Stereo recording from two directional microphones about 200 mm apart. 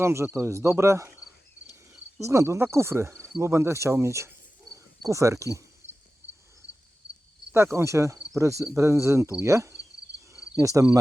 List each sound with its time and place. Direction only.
0.0 s speech: 15° right (ahead or behind)
2.2 s speech: 15° right (ahead or behind)
7.5 s speech: 15° right (ahead or behind)